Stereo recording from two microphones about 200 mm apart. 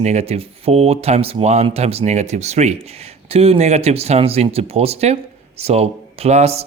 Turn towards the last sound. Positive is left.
turn(degrees=-30)  # may be behind; listen again after turning